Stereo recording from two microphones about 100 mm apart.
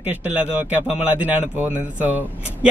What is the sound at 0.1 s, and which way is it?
A man's voice, 15° right (ahead or behind).